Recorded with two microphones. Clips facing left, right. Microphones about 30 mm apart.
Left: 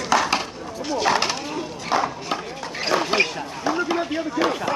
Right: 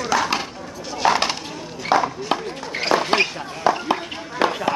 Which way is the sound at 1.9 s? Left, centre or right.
Right.